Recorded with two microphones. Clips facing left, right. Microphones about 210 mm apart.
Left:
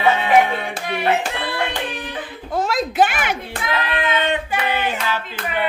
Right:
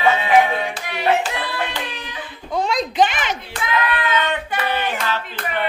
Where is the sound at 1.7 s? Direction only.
55° left (ahead or behind).